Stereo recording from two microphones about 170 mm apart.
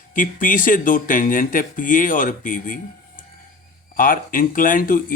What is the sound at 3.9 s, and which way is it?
Speech, 55° left (ahead or behind).